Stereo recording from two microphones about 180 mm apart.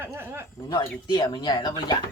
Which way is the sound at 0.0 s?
10° right (ahead or behind).